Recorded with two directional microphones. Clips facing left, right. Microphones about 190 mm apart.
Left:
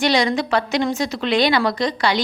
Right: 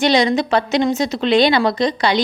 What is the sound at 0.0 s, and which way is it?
A woman's voice, 20° right (ahead or behind).